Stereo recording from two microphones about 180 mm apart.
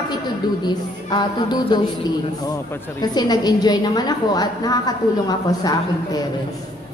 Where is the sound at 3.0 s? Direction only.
20° left (ahead or behind).